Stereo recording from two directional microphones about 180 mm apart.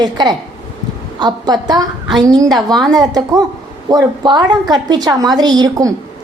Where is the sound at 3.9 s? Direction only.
20° right (ahead or behind).